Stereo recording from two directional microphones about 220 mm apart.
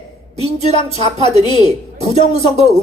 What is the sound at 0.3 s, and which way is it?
Speech, 30° right (ahead or behind).